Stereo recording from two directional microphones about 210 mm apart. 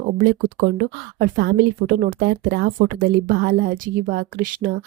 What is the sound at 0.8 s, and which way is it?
Speech, 45° right (ahead or behind).